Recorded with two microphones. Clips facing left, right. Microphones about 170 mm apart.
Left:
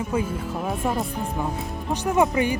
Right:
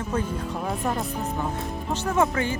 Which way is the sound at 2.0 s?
15° left (ahead or behind).